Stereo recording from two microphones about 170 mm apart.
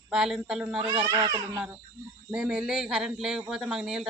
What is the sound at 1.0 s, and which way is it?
Speech, 20° right (ahead or behind).